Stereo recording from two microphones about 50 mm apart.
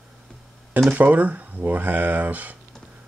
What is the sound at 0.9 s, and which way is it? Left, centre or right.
Speech, right.